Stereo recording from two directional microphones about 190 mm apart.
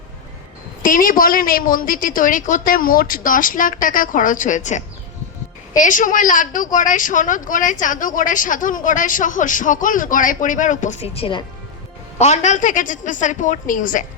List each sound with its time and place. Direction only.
0.8 s a woman's voice: 45° left (ahead or behind)